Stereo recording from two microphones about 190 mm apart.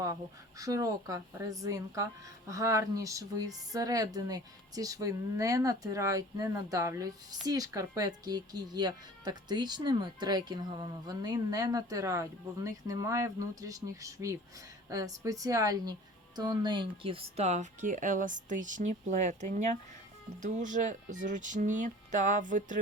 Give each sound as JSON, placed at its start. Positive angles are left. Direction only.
{"t": 0.6, "sound": "speech", "side_deg": -20}